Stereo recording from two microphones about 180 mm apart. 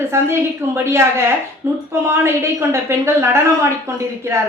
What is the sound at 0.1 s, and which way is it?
A woman's voice, 15° right (ahead or behind).